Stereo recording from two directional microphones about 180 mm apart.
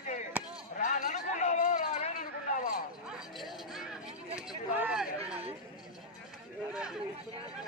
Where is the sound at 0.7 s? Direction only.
45° left (ahead or behind).